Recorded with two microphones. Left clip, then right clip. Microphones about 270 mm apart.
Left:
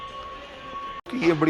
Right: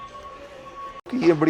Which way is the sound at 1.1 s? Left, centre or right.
Right.